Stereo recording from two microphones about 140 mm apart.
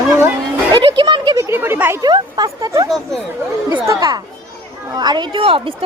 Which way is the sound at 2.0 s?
30° right (ahead or behind).